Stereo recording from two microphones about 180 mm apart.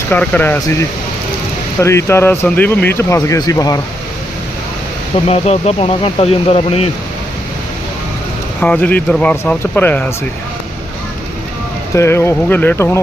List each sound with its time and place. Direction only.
0.1 s speech: 10° left (ahead or behind)
5.1 s speech: 35° left (ahead or behind)
8.6 s speech: 10° left (ahead or behind)
11.9 s speech: 15° left (ahead or behind)